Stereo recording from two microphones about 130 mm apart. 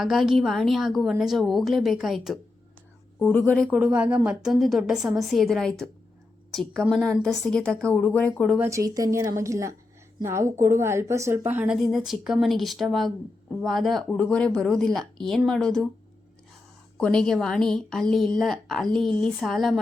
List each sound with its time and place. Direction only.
0.0 s speech: centre (ahead or behind)
3.2 s speech: 10° left (ahead or behind)
3.7 s speech: 10° right (ahead or behind); by 8.5 s 10° left (ahead or behind)
8.7 s a woman's voice: 25° right (ahead or behind)
11.8 s speech: centre (ahead or behind)
17.0 s speech: 5° left (ahead or behind)